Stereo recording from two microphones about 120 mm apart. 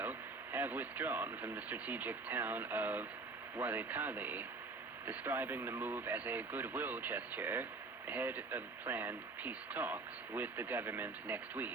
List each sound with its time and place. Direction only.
0.0 s speech: 15° right (ahead or behind)